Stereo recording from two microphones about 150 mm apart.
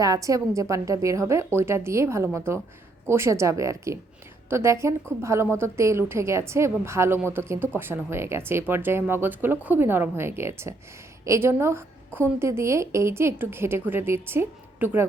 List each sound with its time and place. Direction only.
0.0 s a woman's voice: 25° right (ahead or behind)